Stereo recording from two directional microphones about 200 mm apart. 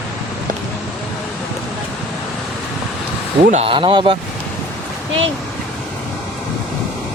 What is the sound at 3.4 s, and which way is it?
Speech, 30° right (ahead or behind).